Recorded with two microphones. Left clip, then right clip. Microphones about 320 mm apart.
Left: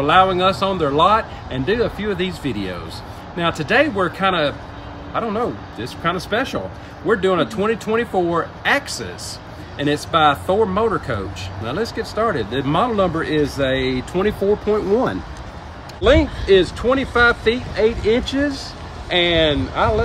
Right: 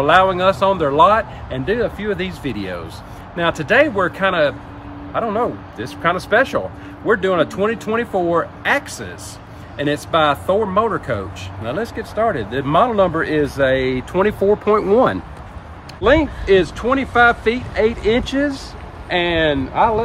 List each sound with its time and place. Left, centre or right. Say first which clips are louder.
0.0 s speech: right 1 dB; centre
10.1 s speech: even; centre
16.0 s speech: right 1 dB; right